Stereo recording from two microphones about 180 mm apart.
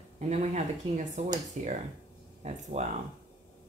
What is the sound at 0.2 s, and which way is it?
Speech, 35° right (ahead or behind).